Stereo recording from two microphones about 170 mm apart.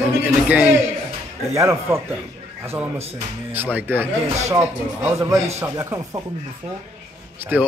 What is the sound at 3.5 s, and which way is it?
A man's voice, 10° right (ahead or behind).